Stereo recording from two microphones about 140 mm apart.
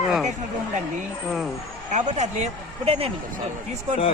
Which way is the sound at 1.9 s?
55° right (ahead or behind).